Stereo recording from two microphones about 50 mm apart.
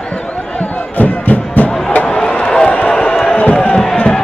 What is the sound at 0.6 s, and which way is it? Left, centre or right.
Music, left.